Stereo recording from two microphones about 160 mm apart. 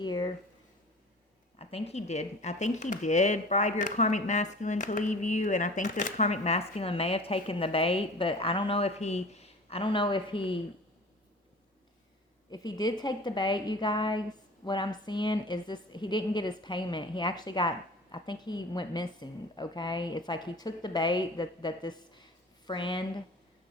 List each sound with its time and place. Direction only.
0.0 s a sound: 25° left (ahead or behind)
1.5 s speech: 40° left (ahead or behind)
12.5 s a woman's voice: 25° left (ahead or behind)